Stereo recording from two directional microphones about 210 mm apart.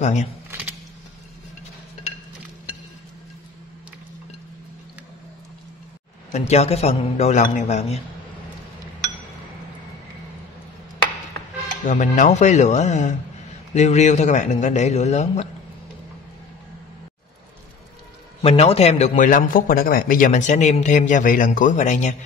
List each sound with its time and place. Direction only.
0.0 s speech: 35° left (ahead or behind)
0.5 s a sound: 10° right (ahead or behind)
6.3 s speech: 30° left (ahead or behind)
11.8 s speech: 35° left (ahead or behind)
18.4 s speech: 30° left (ahead or behind)